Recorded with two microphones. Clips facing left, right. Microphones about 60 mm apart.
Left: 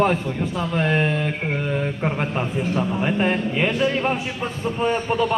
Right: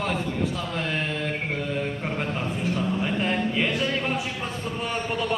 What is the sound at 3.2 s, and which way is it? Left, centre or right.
A man's voice, left.